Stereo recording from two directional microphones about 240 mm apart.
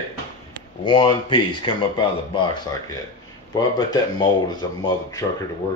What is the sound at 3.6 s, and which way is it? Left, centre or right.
Speech, centre.